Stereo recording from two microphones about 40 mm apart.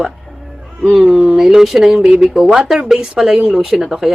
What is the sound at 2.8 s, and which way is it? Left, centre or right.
Speech, centre.